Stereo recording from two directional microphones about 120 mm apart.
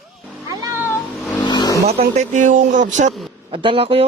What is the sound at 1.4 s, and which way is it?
Vehicle, 35° left (ahead or behind).